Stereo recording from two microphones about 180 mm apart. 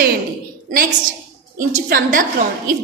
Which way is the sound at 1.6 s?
50° right (ahead or behind).